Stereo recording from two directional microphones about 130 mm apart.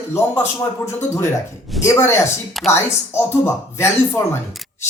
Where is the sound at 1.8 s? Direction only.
20° left (ahead or behind).